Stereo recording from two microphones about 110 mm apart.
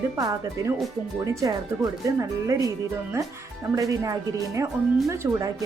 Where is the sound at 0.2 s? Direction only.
35° right (ahead or behind).